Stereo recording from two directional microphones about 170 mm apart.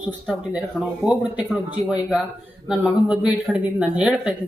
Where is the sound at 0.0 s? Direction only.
5° right (ahead or behind).